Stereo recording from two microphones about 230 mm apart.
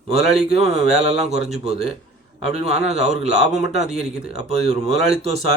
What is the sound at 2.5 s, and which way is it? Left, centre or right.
A man's voice, right.